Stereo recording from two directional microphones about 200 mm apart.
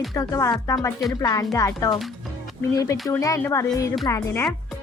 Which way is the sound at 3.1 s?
15° left (ahead or behind).